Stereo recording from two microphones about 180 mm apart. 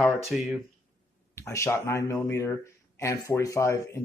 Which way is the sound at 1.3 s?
15° left (ahead or behind).